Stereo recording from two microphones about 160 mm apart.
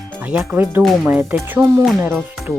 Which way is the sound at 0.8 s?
10° right (ahead or behind).